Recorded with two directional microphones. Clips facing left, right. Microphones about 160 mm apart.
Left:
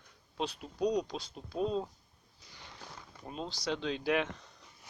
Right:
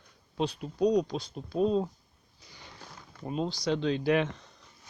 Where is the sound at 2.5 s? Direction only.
Centre (ahead or behind).